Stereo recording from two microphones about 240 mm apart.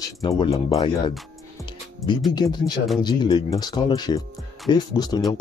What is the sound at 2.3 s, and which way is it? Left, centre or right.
Speech, centre.